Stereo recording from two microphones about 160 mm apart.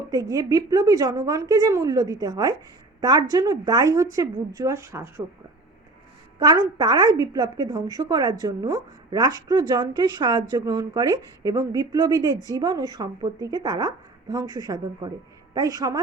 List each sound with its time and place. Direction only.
0.0 s a woman's voice: 20° right (ahead or behind)
6.4 s a woman's voice: 25° right (ahead or behind)